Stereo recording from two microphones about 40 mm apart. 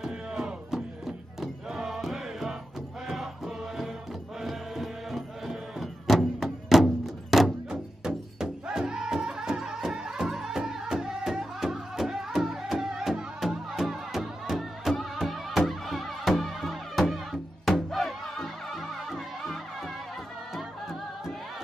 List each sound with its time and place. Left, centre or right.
0.0 s music: centre